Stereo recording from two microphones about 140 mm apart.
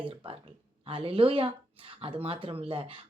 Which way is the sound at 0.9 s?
40° right (ahead or behind).